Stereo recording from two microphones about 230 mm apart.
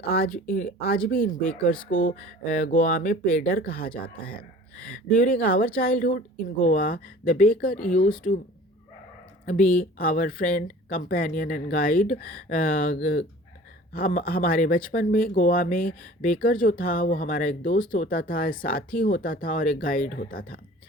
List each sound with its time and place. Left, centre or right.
0.4 s speech: left
9.5 s speech: left
13.9 s speech: left